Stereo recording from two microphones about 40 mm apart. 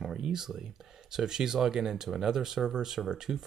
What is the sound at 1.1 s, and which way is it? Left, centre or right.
Speech, centre.